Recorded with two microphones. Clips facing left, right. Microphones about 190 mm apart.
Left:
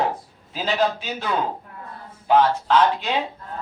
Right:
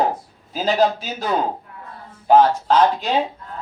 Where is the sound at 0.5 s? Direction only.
40° right (ahead or behind).